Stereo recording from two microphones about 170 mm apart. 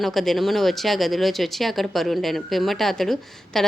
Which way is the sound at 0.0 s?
Centre (ahead or behind).